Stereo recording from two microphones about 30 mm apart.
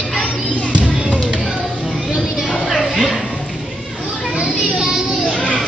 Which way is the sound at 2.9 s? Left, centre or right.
Centre.